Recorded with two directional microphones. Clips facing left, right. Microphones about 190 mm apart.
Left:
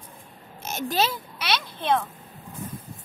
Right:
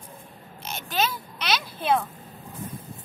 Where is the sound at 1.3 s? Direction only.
Centre (ahead or behind).